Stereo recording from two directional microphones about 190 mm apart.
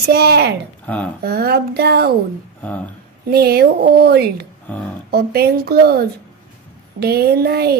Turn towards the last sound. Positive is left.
turn(degrees=-55)  # may be behind; listen again after turning